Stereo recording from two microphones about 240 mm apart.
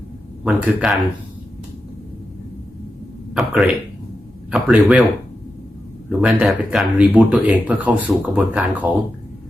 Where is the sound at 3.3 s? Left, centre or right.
Centre.